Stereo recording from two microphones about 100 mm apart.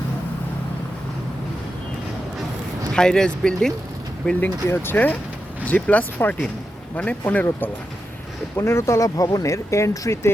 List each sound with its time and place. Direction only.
2.9 s speech: 5° left (ahead or behind)
4.7 s speech: 20° left (ahead or behind)